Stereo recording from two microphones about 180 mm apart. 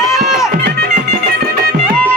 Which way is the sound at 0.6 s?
60° right (ahead or behind).